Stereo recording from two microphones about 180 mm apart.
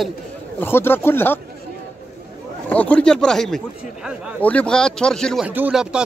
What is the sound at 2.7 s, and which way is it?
Speech, 5° left (ahead or behind).